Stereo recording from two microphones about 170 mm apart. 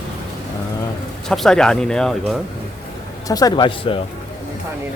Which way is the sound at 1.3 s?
5° left (ahead or behind).